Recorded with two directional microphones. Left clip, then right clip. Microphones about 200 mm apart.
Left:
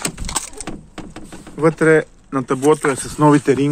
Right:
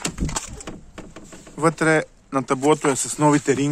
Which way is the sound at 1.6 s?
10° right (ahead or behind).